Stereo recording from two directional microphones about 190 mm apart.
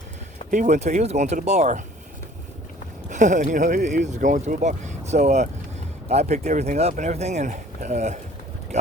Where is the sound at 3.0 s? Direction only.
40° right (ahead or behind).